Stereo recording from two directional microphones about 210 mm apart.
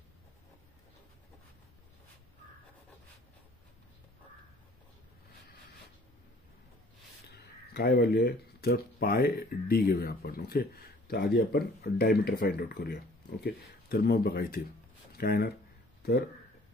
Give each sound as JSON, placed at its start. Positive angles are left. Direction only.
{"t": 7.3, "sound": "speech", "side_deg": 50}